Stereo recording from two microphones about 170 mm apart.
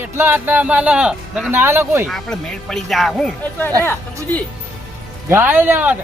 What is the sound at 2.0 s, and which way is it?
Speech, 5° left (ahead or behind).